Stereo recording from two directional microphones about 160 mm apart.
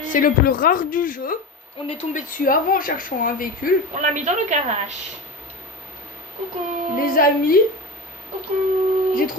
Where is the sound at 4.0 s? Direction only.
50° right (ahead or behind).